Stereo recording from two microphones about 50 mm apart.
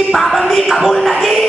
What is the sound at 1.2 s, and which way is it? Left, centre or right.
Music, centre.